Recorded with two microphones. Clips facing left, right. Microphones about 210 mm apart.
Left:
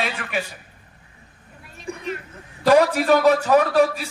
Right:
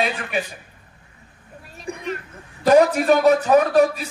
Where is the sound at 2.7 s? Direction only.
20° right (ahead or behind).